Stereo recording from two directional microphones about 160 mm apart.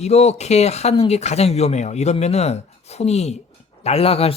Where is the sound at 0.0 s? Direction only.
40° left (ahead or behind).